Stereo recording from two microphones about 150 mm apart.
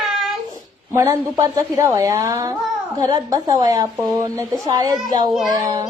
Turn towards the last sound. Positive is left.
turn(degrees=-25)  # may be behind; listen again after turning